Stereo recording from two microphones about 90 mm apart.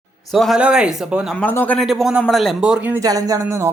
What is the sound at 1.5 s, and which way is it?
Speech, 20° left (ahead or behind).